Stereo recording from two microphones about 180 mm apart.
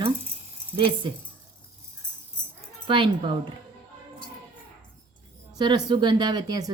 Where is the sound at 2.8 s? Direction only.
25° right (ahead or behind).